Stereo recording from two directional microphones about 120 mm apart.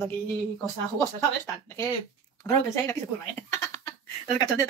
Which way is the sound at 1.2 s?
25° left (ahead or behind).